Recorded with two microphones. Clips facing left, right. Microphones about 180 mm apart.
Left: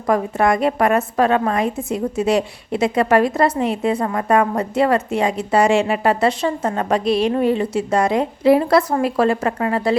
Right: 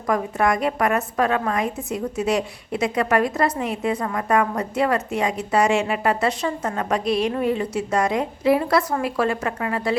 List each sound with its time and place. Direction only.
0.1 s a woman's voice: 30° left (ahead or behind)